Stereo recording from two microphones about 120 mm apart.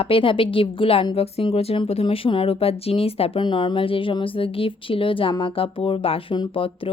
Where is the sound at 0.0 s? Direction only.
50° left (ahead or behind).